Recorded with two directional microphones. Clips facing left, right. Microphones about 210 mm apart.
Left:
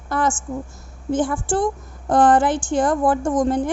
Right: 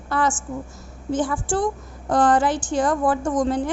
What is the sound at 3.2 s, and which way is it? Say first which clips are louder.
Speech: left 2 dB; 25° left (ahead or behind).